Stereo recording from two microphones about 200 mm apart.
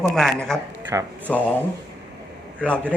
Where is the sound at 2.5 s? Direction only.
5° left (ahead or behind).